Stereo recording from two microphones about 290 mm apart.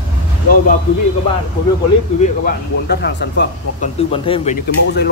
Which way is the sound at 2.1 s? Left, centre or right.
Left.